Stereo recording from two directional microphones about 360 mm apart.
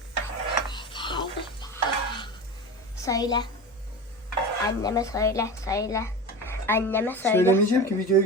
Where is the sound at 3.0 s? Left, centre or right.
Centre.